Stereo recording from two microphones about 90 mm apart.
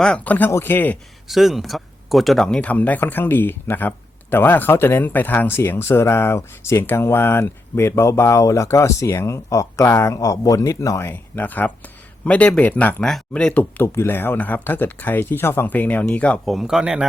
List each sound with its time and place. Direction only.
0.0 s speech: 15° left (ahead or behind)
1.3 s speech: 5° right (ahead or behind); by 13.0 s 20° left (ahead or behind)
13.0 s speech: 5° left (ahead or behind)
16.5 s speech: 5° right (ahead or behind)